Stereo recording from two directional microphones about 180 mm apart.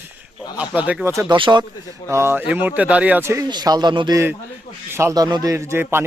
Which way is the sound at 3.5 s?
20° right (ahead or behind).